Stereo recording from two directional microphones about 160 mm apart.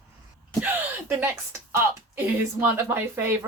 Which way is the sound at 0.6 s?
10° right (ahead or behind).